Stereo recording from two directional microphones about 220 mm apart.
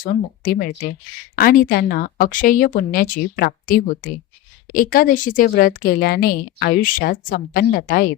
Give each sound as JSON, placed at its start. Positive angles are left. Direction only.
{"t": 0.0, "sound": "a woman's voice", "side_deg": 40}